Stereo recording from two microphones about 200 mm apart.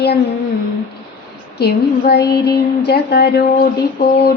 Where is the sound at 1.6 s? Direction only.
55° left (ahead or behind).